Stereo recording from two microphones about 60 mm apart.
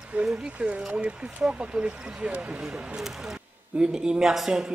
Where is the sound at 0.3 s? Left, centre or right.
Centre.